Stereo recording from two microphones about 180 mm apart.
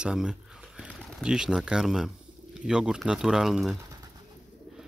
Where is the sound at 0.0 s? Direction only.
5° right (ahead or behind).